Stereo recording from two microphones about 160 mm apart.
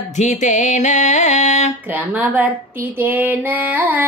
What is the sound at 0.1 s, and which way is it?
Speech, 50° left (ahead or behind).